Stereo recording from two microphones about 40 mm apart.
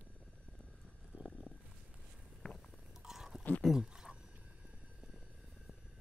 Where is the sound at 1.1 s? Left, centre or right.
Right.